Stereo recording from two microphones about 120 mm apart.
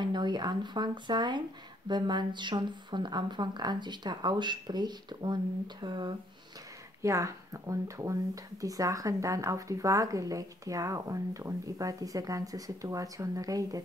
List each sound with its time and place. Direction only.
0.0 s speech: 40° right (ahead or behind)
7.0 s speech: 25° right (ahead or behind)